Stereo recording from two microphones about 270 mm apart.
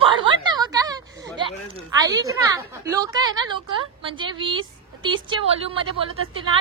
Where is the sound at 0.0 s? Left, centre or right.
Centre.